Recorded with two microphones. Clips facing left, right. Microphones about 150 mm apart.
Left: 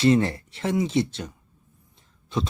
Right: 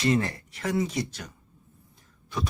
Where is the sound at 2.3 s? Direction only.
25° left (ahead or behind).